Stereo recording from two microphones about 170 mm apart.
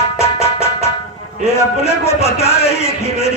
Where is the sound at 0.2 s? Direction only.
35° left (ahead or behind).